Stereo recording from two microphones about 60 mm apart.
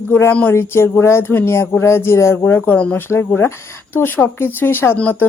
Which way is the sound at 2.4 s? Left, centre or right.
Left.